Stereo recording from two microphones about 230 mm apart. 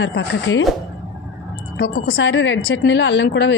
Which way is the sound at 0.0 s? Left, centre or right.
Left.